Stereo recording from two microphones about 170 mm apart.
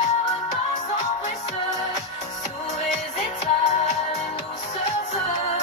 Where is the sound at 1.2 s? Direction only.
45° left (ahead or behind).